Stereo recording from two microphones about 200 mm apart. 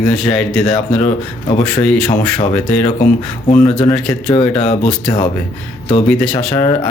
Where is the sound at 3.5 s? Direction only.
25° left (ahead or behind).